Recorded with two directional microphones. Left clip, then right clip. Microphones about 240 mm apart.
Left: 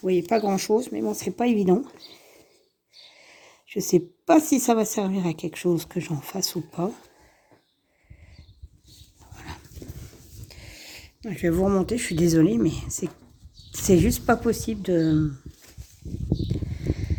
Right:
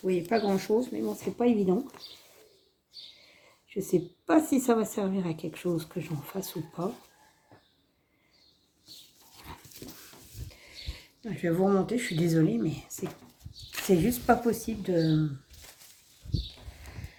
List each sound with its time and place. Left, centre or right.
0.0 s speech: left
3.2 s speech: left
10.5 s speech: left